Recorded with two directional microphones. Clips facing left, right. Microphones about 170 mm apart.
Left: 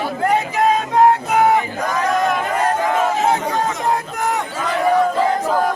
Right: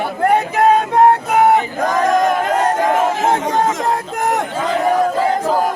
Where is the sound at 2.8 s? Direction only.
45° right (ahead or behind).